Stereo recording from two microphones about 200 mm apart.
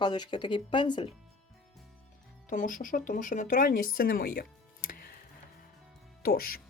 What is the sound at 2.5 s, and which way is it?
Speech, 40° left (ahead or behind).